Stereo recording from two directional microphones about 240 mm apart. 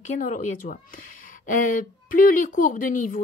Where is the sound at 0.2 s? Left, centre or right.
Left.